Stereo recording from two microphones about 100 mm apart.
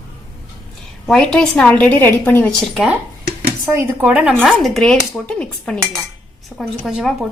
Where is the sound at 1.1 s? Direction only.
5° left (ahead or behind).